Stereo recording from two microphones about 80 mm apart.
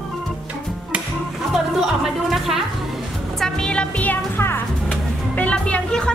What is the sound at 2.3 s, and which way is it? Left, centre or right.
Speech, centre.